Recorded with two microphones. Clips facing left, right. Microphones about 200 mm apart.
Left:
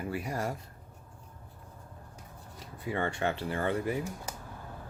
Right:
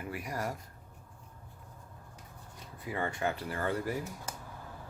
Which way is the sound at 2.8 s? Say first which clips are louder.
Left 3 dB; 30° left (ahead or behind).